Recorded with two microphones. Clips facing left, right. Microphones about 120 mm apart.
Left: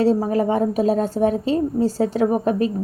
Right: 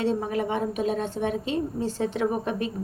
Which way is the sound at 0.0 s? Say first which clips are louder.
Left 8 dB; 40° left (ahead or behind).